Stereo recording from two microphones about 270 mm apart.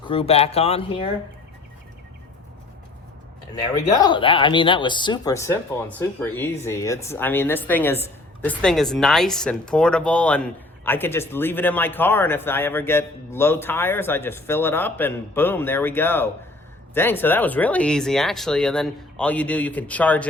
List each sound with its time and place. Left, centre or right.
0.0 s speech: left
4.0 s speech: centre